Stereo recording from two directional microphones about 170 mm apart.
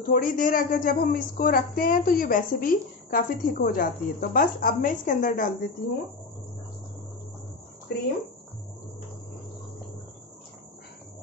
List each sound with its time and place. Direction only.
0.1 s a woman's voice: 55° left (ahead or behind)
7.9 s speech: 75° left (ahead or behind)